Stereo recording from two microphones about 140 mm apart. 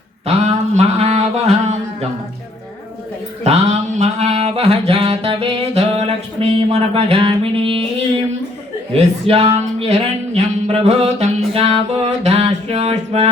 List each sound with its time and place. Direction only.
0.3 s mantra: 50° right (ahead or behind)
3.4 s mantra: 50° right (ahead or behind)
8.9 s speech: 45° right (ahead or behind)
9.6 s music: 50° right (ahead or behind)